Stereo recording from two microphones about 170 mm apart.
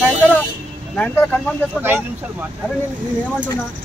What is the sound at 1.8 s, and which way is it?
Speech, 10° right (ahead or behind).